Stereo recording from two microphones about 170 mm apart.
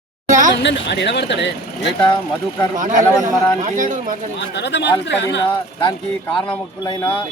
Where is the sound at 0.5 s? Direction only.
90° left.